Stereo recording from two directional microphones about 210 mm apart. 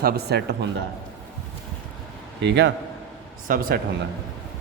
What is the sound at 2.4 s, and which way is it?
Speech, 55° right (ahead or behind).